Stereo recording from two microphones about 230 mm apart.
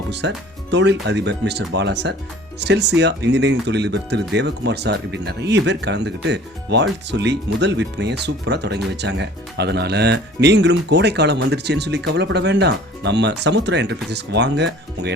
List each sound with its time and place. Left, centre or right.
0.1 s speech: right